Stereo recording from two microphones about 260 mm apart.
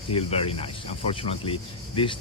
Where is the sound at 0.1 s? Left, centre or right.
Left.